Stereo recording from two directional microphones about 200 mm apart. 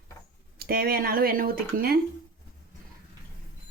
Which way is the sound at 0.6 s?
50° right (ahead or behind).